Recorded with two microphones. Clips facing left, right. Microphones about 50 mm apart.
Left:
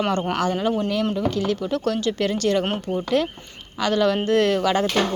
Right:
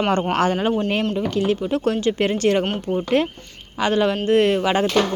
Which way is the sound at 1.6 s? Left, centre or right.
Right.